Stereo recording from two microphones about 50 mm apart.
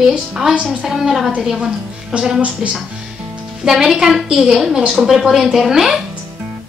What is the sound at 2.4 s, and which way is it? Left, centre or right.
Speech, right.